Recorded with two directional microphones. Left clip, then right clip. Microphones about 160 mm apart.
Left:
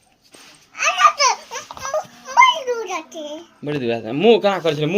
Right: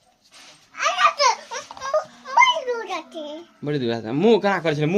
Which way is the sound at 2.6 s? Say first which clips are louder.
Left 3 dB; 10° right (ahead or behind).